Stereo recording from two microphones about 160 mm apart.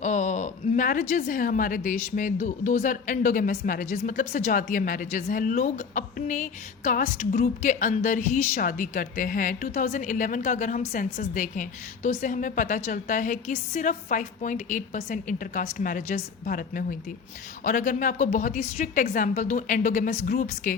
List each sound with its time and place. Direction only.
0.0 s a woman's voice: 45° left (ahead or behind)